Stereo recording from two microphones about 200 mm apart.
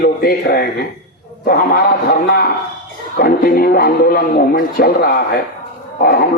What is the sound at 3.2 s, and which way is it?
A man's voice, 50° left (ahead or behind).